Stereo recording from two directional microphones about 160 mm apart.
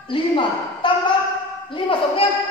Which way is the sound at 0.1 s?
30° left (ahead or behind).